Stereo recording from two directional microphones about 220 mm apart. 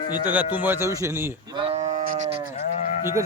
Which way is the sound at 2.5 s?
35° left (ahead or behind).